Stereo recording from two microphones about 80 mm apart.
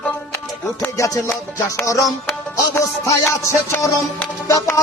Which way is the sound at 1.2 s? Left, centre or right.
Left.